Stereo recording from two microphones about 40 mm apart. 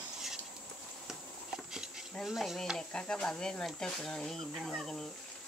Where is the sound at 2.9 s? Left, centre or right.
Left.